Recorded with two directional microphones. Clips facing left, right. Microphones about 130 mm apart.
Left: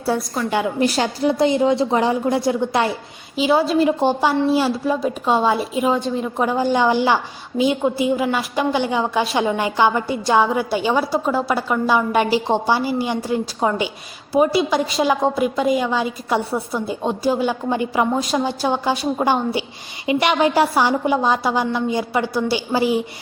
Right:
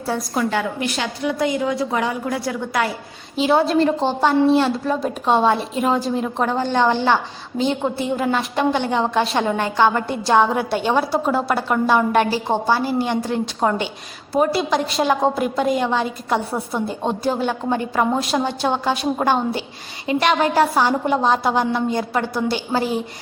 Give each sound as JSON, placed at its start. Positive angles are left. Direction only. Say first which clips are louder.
{"t": 0.1, "sound": "a woman's voice", "louder": "left 2 dB", "side_deg": 15}
{"t": 0.8, "sound": "a woman's voice", "louder": "left 5 dB", "side_deg": 35}
{"t": 3.3, "sound": "a woman's voice", "louder": "even", "side_deg": 0}
{"t": 12.3, "sound": "a woman's voice", "louder": "left 1 dB", "side_deg": 15}
{"t": 18.1, "sound": "a woman's voice", "louder": "even", "side_deg": 0}